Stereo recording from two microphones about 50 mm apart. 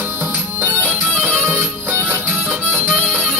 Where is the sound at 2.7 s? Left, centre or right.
Right.